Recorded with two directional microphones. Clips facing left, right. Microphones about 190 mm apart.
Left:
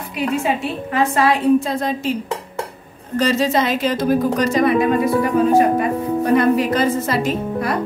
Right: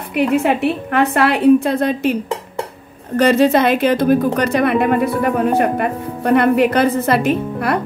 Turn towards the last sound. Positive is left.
turn(degrees=-60)  # may be behind; listen again after turning